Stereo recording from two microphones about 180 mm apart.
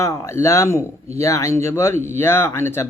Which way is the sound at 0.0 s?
15° left (ahead or behind).